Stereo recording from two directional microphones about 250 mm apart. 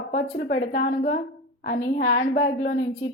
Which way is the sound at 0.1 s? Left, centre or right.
Left.